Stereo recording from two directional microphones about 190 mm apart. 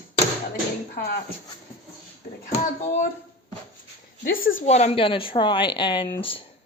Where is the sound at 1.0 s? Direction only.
50° left (ahead or behind).